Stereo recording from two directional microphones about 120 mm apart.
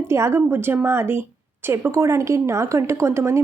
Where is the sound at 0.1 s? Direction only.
20° right (ahead or behind).